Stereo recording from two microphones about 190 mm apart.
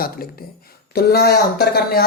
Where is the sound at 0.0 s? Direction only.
50° left (ahead or behind).